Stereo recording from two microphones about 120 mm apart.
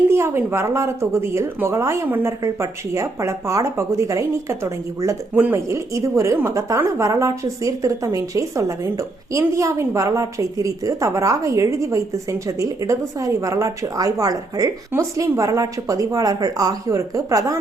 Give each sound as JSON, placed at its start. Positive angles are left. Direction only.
{"t": 0.1, "sound": "a woman's voice", "side_deg": -20}